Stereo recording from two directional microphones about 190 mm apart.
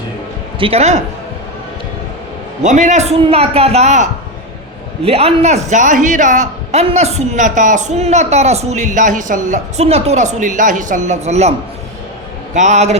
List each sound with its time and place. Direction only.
0.6 s a man's voice: 35° right (ahead or behind)
2.6 s a man's voice: 40° right (ahead or behind)
12.5 s a man's voice: 40° right (ahead or behind)